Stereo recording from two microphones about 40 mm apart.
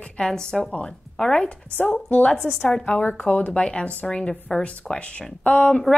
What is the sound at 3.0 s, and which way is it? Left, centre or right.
Speech, left.